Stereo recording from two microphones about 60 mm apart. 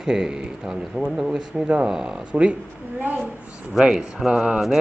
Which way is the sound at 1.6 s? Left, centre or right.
Right.